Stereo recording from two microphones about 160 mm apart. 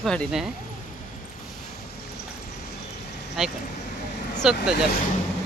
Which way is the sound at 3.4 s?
Centre (ahead or behind).